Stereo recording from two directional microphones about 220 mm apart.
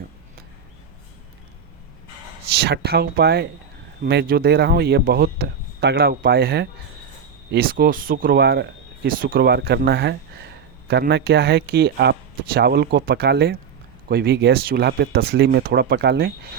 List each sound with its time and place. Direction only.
2.6 s speech: 45° right (ahead or behind)